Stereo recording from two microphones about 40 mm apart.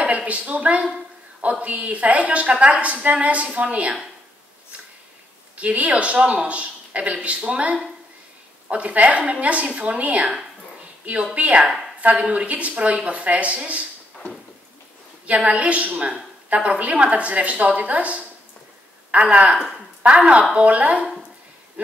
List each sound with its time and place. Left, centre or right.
0.0 s a woman's voice: right
5.6 s a woman's voice: right
11.3 s a woman's voice: right
15.2 s a woman's voice: right
21.8 s a sound: right